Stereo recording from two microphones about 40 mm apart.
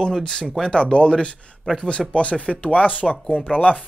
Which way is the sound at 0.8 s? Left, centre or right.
Left.